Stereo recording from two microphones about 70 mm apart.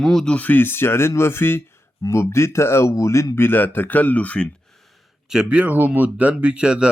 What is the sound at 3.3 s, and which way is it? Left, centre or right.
Speech, left.